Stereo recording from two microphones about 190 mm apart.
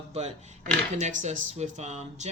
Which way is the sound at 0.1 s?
35° right (ahead or behind).